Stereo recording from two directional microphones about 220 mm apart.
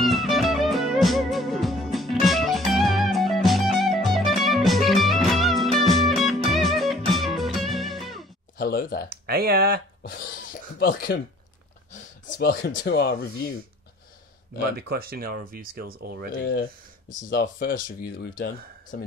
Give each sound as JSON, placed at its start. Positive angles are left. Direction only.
{"t": 0.0, "sound": "music", "side_deg": 0}
{"t": 8.5, "sound": "a sound", "side_deg": 40}
{"t": 9.1, "sound": "speech", "side_deg": -45}
{"t": 10.0, "sound": "a sound", "side_deg": 40}
{"t": 11.1, "sound": "speech", "side_deg": 50}
{"t": 14.8, "sound": "speech", "side_deg": -45}
{"t": 17.3, "sound": "speech", "side_deg": 40}